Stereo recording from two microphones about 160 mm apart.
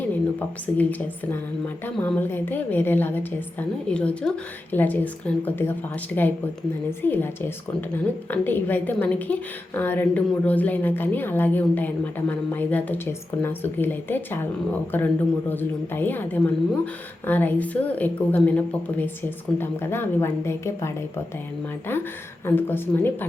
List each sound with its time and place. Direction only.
0.0 s a woman's voice: 10° left (ahead or behind)